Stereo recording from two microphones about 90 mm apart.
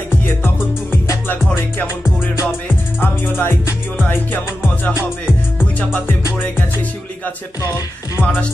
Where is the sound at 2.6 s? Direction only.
20° left (ahead or behind).